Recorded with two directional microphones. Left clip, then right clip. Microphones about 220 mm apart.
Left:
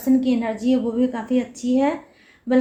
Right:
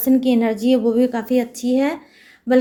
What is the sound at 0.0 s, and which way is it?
A woman's voice, 45° right (ahead or behind).